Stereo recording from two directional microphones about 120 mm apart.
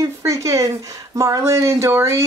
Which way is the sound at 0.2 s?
25° right (ahead or behind).